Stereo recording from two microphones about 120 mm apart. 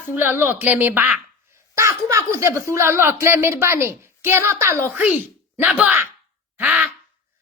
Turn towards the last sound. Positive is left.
turn(degrees=-10)  # may be behind; listen again after turning